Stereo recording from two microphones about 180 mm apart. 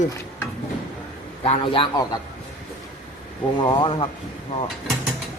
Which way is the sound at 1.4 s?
30° left (ahead or behind).